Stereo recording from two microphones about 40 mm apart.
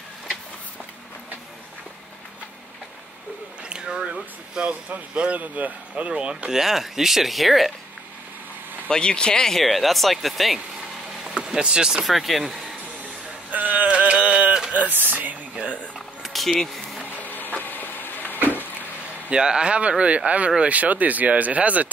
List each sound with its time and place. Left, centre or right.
3.6 s a sound: right
4.9 s speech: right
6.0 s speech: right
6.5 s speech: centre
8.8 s speech: left
9.6 s speech: centre
11.3 s speech: centre
12.1 s speech: centre
13.5 s a sound: right
13.8 s music: right
14.7 s speech: right
16.3 s a sound: centre
17.2 s vehicle: left
19.3 s speech: right